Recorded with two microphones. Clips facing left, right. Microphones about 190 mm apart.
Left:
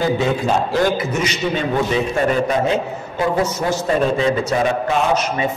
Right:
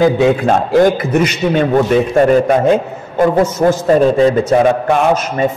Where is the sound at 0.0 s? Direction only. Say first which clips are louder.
Right 7 dB; 60° right (ahead or behind).